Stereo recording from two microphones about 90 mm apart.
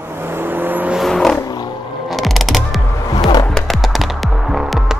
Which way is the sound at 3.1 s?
55° left (ahead or behind).